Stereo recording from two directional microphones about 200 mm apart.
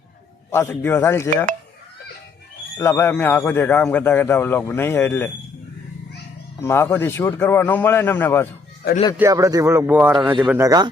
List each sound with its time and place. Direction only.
0.5 s a man's voice: 15° left (ahead or behind)
2.7 s a man's voice: 10° left (ahead or behind)
6.6 s a man's voice: 10° left (ahead or behind)
9.1 s speech: 15° right (ahead or behind)
10.6 s speech: 20° right (ahead or behind)